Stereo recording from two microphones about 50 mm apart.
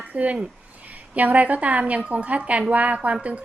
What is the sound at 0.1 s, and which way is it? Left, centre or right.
A woman's voice, right.